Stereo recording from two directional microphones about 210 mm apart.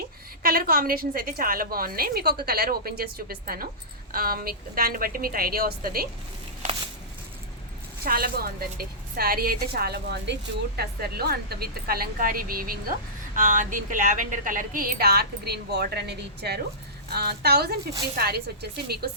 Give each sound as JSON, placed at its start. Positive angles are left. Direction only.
{"t": 0.4, "sound": "a woman's voice", "side_deg": -45}
{"t": 8.0, "sound": "a woman's voice", "side_deg": -45}